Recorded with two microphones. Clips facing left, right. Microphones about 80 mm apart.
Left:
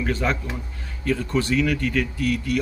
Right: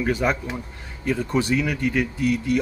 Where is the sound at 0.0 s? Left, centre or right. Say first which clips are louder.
Right 2 dB; centre.